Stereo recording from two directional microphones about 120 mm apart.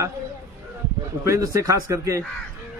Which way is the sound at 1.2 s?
25° right (ahead or behind).